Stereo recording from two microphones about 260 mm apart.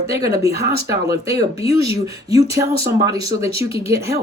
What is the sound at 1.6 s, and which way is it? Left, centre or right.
Speech, left.